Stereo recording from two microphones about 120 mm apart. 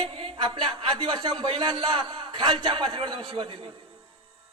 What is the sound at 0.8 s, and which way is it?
A man's voice, 50° right (ahead or behind).